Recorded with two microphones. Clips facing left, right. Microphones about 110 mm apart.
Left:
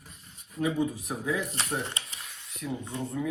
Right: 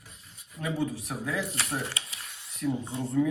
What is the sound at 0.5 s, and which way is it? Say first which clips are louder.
Speech: left 3 dB; centre (ahead or behind).